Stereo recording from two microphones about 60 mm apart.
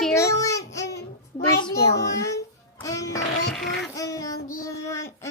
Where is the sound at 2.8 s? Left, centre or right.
Left.